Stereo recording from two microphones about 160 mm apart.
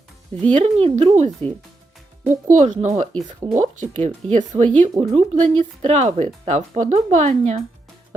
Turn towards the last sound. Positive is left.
turn(degrees=-45)  # may be behind; listen again after turning